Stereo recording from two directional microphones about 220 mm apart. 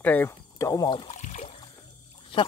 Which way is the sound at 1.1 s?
30° left (ahead or behind).